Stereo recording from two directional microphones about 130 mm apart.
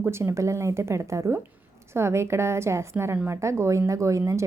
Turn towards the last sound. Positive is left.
turn(degrees=-20)  # may be behind; listen again after turning